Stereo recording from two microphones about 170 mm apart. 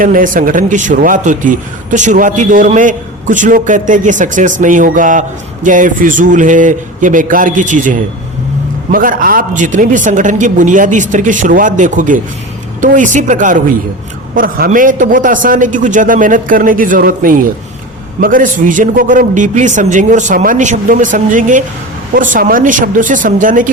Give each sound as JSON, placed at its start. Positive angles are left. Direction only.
{"t": 0.0, "sound": "a man's voice", "side_deg": -55}